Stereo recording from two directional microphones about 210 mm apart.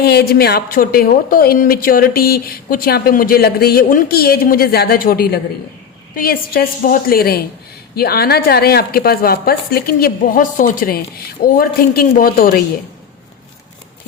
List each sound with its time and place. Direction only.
0.0 s a woman's voice: 50° left (ahead or behind)